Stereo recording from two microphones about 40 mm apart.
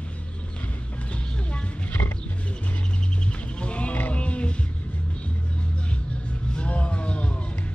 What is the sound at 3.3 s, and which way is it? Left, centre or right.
Music, left.